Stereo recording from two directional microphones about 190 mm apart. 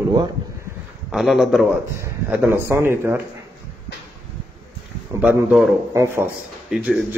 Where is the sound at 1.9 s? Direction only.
15° right (ahead or behind).